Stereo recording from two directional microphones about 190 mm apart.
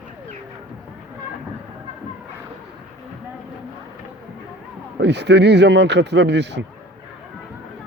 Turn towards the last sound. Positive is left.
turn(degrees=-65)  # may be behind; listen again after turning